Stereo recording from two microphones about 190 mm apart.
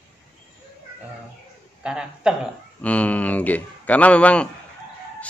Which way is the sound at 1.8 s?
5° right (ahead or behind).